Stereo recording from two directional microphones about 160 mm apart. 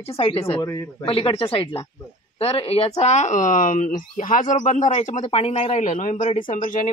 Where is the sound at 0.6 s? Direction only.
25° left (ahead or behind).